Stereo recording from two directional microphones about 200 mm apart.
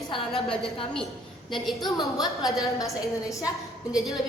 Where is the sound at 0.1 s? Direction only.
Centre (ahead or behind).